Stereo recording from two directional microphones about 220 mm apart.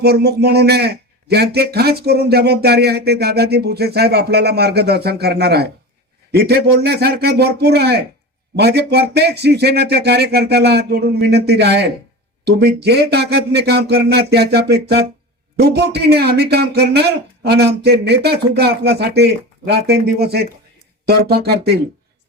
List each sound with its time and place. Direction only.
0.0 s speech: 45° right (ahead or behind)